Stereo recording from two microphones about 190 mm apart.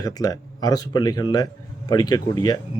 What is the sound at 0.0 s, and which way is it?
Speech, 20° left (ahead or behind).